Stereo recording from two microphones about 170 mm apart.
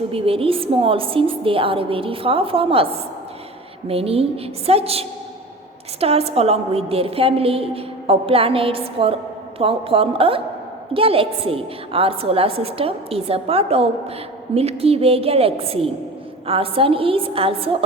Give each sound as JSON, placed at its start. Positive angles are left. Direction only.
{"t": 0.1, "sound": "a woman's voice", "side_deg": -35}
{"t": 3.8, "sound": "a woman's voice", "side_deg": -35}